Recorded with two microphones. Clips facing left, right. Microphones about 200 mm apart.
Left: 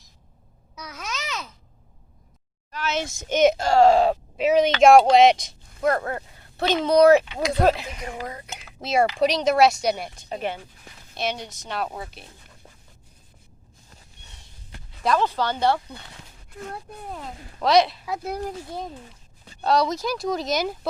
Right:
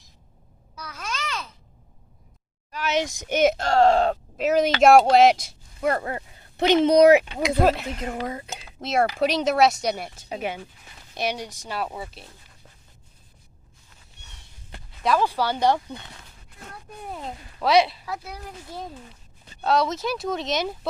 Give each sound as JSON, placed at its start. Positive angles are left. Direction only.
{"t": 0.8, "sound": "babbling", "side_deg": 10}
{"t": 2.7, "sound": "speech", "side_deg": -15}
{"t": 6.6, "sound": "speech", "side_deg": -20}
{"t": 7.6, "sound": "speech", "side_deg": 0}
{"t": 8.2, "sound": "speech", "side_deg": -25}
{"t": 8.8, "sound": "speech", "side_deg": 0}
{"t": 15.0, "sound": "speech", "side_deg": -10}
{"t": 17.6, "sound": "speech", "side_deg": -5}
{"t": 18.2, "sound": "speech", "side_deg": 45}
{"t": 19.6, "sound": "speech", "side_deg": 0}